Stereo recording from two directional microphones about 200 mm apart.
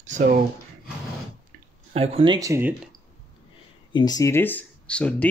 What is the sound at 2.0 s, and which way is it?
Speech, 30° right (ahead or behind).